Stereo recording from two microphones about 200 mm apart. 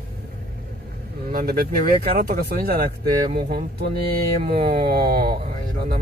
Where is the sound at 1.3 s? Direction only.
50° right (ahead or behind).